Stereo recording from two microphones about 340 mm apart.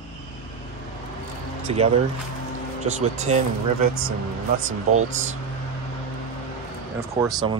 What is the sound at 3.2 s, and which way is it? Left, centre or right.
Speech, centre.